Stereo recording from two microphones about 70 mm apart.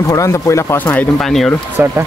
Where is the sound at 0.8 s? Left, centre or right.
Left.